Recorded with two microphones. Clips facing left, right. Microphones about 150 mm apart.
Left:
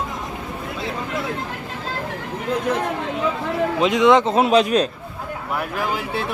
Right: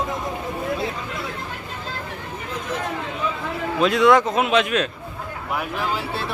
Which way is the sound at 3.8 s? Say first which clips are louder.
Even; 20° left (ahead or behind).